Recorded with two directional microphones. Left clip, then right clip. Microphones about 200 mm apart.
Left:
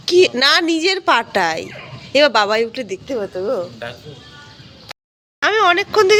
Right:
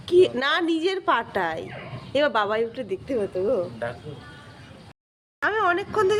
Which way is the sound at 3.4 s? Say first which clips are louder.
Left 3 dB; 15° left (ahead or behind).